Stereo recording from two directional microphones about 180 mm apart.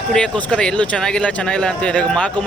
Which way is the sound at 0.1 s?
5° left (ahead or behind).